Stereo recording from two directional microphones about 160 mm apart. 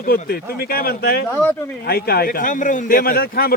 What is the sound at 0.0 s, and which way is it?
A man's voice, 70° left (ahead or behind).